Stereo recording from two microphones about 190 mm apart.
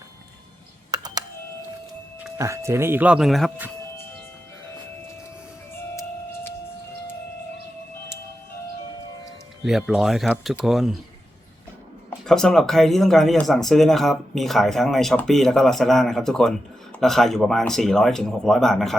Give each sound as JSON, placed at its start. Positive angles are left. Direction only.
{"t": 0.9, "sound": "a sound", "side_deg": -20}
{"t": 2.4, "sound": "speech", "side_deg": -15}
{"t": 9.6, "sound": "speech", "side_deg": -5}
{"t": 12.2, "sound": "speech", "side_deg": 5}